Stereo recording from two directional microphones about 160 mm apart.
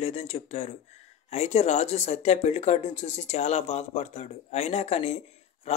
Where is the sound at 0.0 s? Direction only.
40° left (ahead or behind).